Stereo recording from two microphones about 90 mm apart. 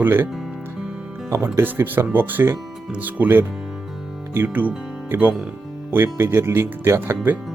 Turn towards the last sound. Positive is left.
turn(degrees=-25)  # may be behind; listen again after turning